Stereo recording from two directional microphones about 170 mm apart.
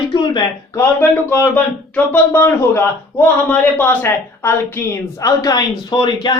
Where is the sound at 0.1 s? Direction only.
25° left (ahead or behind).